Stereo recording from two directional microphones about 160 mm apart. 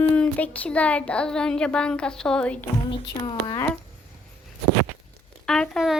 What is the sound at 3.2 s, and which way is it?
Speech, 25° left (ahead or behind).